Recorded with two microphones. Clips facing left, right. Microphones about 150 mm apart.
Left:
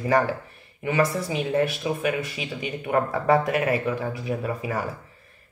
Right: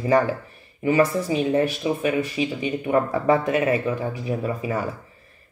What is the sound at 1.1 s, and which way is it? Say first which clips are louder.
Speech: right 3 dB; 30° right (ahead or behind).